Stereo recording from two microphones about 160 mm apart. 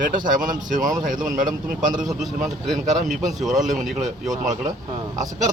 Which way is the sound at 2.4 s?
Centre (ahead or behind).